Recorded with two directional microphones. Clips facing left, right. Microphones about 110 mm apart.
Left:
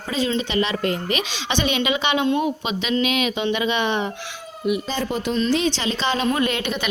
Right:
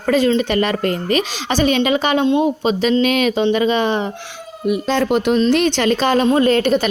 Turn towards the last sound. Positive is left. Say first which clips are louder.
# right 9 dB
turn(degrees=-40)  # may be behind; listen again after turning